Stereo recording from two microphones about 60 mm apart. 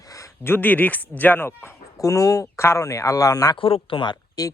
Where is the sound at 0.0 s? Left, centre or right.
Left.